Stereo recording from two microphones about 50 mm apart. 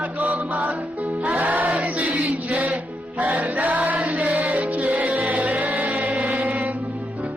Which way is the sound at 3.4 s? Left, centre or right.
Right.